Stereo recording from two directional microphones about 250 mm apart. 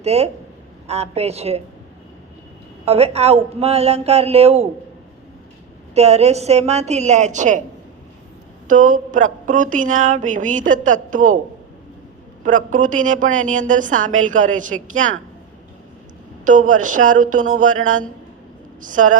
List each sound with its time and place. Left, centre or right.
0.0 s a man's voice: right
2.8 s a man's voice: right
5.9 s a man's voice: right
8.6 s a woman's voice: right
12.5 s a woman's voice: right
16.4 s a woman's voice: right
18.8 s a woman's voice: right